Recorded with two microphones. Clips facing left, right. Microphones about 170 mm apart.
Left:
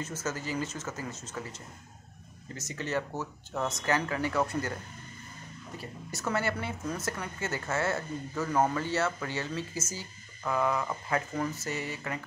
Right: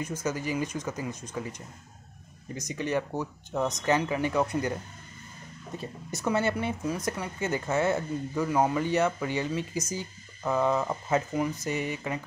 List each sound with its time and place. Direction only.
0.0 s speech: 15° right (ahead or behind)
5.8 s speech: 20° right (ahead or behind)